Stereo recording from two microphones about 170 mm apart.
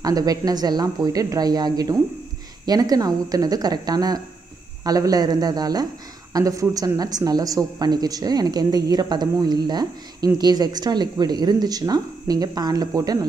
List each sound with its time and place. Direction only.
0.0 s speech: 20° right (ahead or behind)